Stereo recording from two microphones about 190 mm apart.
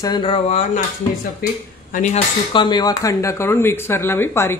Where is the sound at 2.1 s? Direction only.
25° left (ahead or behind).